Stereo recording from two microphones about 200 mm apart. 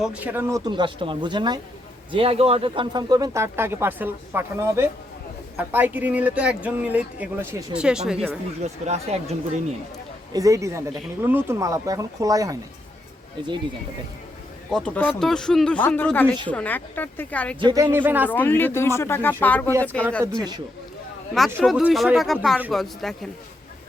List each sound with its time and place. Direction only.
0.0 s speech: 5° right (ahead or behind)
8.9 s speech: 35° right (ahead or behind)
10.3 s speech: 15° right (ahead or behind)
14.7 s speech: 5° left (ahead or behind)
17.6 s speech: 20° right (ahead or behind)
17.9 s speech: 10° right (ahead or behind)
18.3 s speech: 10° left (ahead or behind)
20.2 s speech: 20° right (ahead or behind)
21.6 s speech: centre (ahead or behind)